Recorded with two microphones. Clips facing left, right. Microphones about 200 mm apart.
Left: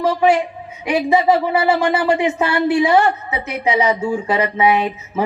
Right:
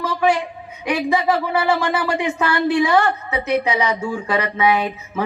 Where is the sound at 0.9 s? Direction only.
25° left (ahead or behind).